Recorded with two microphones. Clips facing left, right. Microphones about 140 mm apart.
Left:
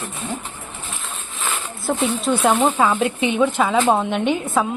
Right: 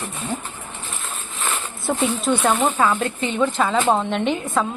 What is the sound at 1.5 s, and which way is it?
A woman's voice, centre (ahead or behind).